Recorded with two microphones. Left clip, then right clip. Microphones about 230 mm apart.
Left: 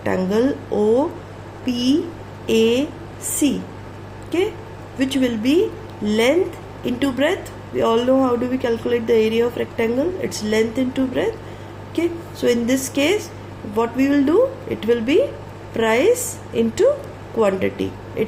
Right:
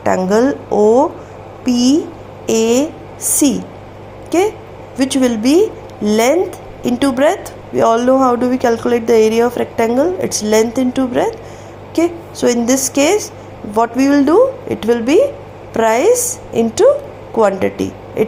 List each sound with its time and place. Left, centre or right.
0.0 s speech: right
4.9 s speech: right